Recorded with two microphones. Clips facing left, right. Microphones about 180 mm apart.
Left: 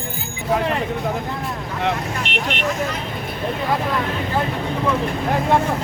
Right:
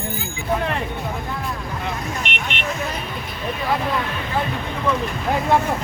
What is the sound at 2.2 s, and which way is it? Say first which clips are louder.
Speech: left 4 dB; 35° left (ahead or behind).